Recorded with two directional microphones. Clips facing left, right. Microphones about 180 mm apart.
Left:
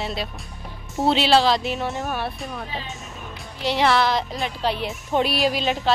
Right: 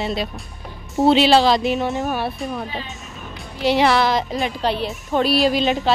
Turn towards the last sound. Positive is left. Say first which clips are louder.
# right 4 dB
turn(degrees=0)  # may be behind; listen again after turning